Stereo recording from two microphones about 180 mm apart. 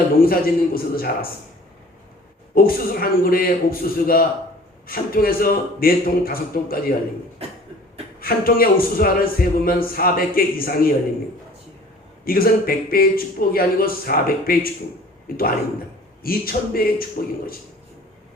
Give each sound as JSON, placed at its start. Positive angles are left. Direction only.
{"t": 0.2, "sound": "speech", "side_deg": 55}
{"t": 2.6, "sound": "speech", "side_deg": 55}
{"t": 8.2, "sound": "speech", "side_deg": 55}
{"t": 12.2, "sound": "speech", "side_deg": 55}